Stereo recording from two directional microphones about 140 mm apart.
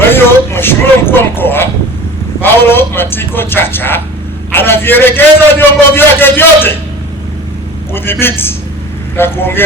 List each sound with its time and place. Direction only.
0.1 s a man's voice: 15° left (ahead or behind)
7.9 s a man's voice: 15° left (ahead or behind)